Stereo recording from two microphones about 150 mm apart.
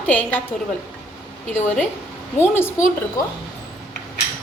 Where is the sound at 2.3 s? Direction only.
15° left (ahead or behind).